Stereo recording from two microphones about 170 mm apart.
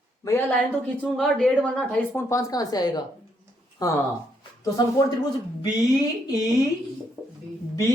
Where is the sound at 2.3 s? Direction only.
20° left (ahead or behind).